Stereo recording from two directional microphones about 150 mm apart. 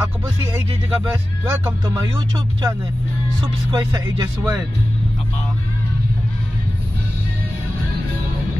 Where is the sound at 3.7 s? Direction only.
30° right (ahead or behind).